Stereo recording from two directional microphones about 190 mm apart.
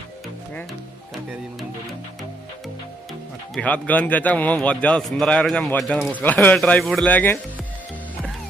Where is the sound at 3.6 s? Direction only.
5° left (ahead or behind).